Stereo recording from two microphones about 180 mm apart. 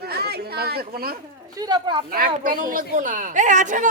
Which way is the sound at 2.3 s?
50° right (ahead or behind).